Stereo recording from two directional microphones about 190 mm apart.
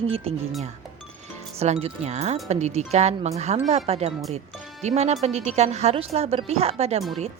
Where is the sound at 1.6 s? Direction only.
35° right (ahead or behind).